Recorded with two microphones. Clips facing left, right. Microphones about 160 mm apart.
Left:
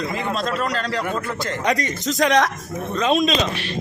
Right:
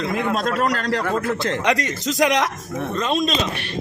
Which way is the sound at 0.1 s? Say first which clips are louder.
Right 2 dB; 55° right (ahead or behind).